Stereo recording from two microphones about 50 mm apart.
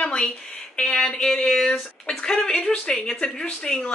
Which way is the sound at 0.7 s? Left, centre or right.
Left.